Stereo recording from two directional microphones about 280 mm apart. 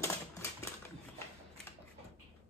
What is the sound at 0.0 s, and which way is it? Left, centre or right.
Typewriter, centre.